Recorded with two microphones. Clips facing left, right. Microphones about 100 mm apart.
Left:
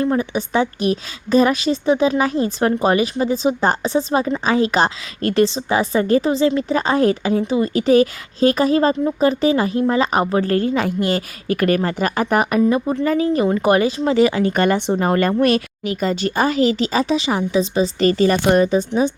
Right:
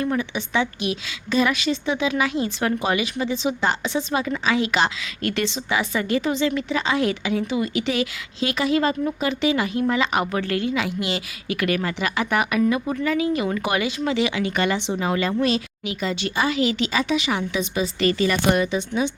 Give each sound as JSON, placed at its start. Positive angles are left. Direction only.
{"t": 0.0, "sound": "a woman's voice", "side_deg": 35}
{"t": 13.1, "sound": "a woman's voice", "side_deg": 40}
{"t": 15.9, "sound": "a woman's voice", "side_deg": 45}